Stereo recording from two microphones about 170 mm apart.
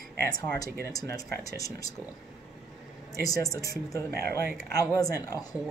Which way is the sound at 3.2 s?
20° left (ahead or behind).